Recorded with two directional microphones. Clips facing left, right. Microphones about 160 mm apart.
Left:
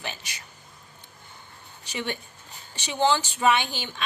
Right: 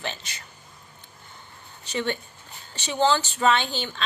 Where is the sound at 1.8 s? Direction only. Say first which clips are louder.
Right 4 dB; 15° left (ahead or behind).